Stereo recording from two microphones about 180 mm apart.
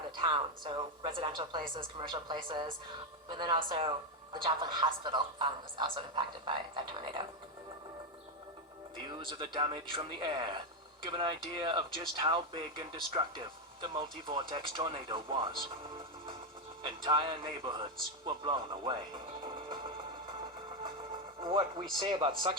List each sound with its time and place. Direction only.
0.2 s speech: 25° right (ahead or behind)
9.0 s speech: 25° right (ahead or behind)
16.8 s speech: 25° right (ahead or behind)
21.4 s speech: 30° right (ahead or behind)